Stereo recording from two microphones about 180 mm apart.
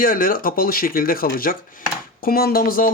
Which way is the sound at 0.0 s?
50° left (ahead or behind).